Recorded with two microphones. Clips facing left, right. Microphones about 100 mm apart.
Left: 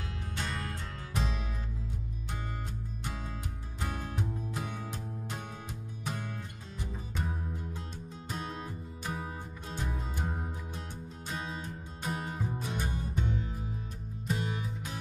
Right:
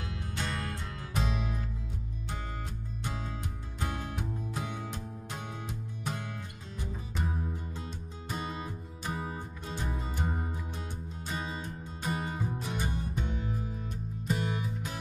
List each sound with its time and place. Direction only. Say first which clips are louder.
0.1 s music: right 2 dB; centre (ahead or behind)
3.8 s music: even; centre (ahead or behind)
6.8 s music: right 1 dB; 5° right (ahead or behind)